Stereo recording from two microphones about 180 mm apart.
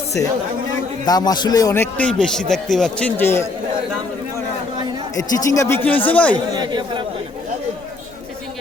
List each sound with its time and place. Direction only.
1.0 s a man's voice: 20° left (ahead or behind)
5.1 s a man's voice: 20° left (ahead or behind)
6.3 s speech: 25° right (ahead or behind)